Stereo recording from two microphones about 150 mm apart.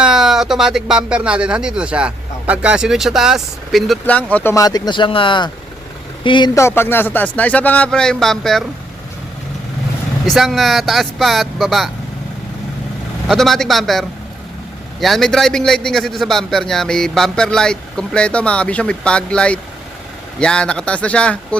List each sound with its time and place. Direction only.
0.0 s a man's voice: 5° right (ahead or behind)
4.5 s speech: 25° left (ahead or behind)
6.6 s speech: 15° left (ahead or behind)
10.2 s a man's voice: centre (ahead or behind)
13.2 s a man's voice: centre (ahead or behind)
15.0 s a man's voice: centre (ahead or behind)